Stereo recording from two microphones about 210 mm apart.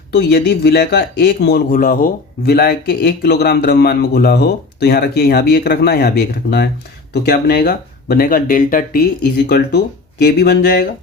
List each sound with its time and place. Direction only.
0.2 s speech: 50° left (ahead or behind)